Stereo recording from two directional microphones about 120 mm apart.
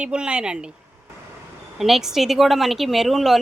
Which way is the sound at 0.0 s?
10° right (ahead or behind).